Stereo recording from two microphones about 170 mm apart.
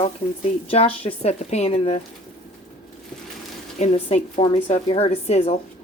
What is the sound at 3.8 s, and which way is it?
Speech, 40° left (ahead or behind).